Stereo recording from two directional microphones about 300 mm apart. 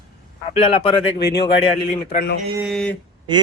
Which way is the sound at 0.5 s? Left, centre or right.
Centre.